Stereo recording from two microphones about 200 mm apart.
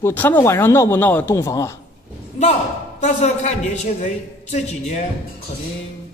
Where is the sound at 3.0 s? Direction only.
35° left (ahead or behind).